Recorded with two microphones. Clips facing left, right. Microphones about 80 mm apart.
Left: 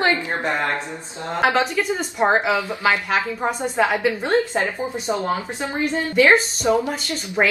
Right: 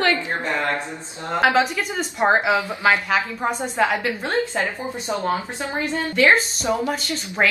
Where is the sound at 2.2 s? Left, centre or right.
Centre.